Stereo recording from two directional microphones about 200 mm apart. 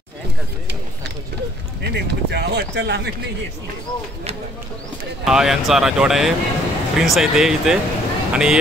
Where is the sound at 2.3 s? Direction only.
55° right (ahead or behind).